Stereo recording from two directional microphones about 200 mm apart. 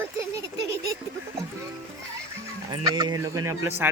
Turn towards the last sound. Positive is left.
turn(degrees=-10)  # may be behind; listen again after turning